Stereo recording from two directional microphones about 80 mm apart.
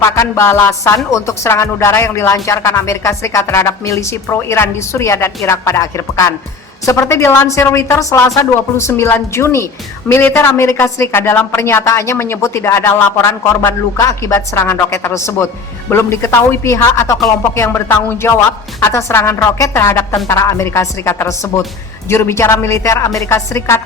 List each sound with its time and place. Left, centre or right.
0.0 s music: left
14.0 s music: left